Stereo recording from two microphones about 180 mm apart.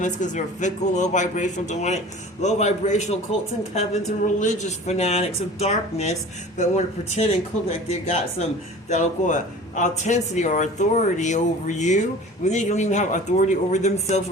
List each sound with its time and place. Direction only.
0.0 s a man's voice: 45° left (ahead or behind)